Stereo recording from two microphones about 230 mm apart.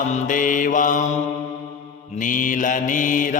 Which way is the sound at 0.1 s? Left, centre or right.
Left.